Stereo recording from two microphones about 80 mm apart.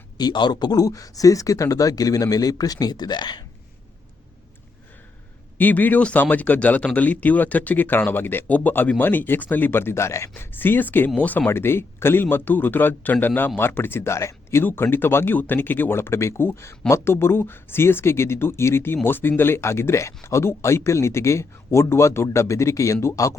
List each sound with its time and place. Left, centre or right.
0.2 s speech: left
5.5 s speech: left
11.4 s speech: left
14.6 s speech: left